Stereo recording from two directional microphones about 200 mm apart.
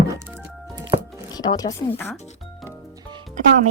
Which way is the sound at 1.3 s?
20° left (ahead or behind).